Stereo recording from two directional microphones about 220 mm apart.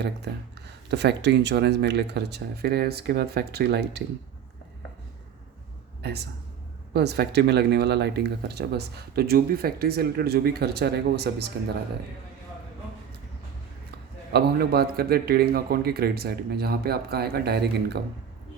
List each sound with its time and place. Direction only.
0.9 s speech: 50° right (ahead or behind)
6.0 s speech: 50° right (ahead or behind)
14.3 s speech: 45° right (ahead or behind)